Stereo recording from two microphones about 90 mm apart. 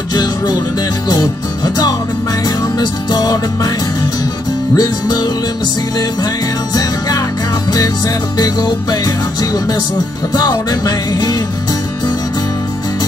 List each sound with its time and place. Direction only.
0.1 s music: 50° left (ahead or behind)
4.7 s music: 50° left (ahead or behind)
8.4 s music: 45° left (ahead or behind)